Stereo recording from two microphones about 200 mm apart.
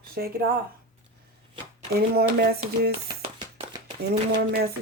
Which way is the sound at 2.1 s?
50° right (ahead or behind).